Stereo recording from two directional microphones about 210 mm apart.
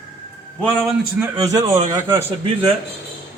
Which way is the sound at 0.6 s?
5° left (ahead or behind).